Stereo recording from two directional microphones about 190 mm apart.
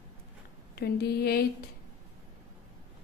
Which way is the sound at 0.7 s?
55° left (ahead or behind).